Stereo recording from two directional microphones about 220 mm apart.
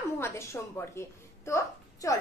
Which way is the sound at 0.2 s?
10° left (ahead or behind).